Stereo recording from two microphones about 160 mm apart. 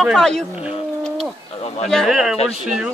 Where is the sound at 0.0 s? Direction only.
5° left (ahead or behind).